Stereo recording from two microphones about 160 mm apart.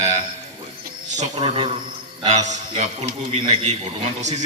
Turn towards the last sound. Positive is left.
turn(degrees=-45)  # may be behind; listen again after turning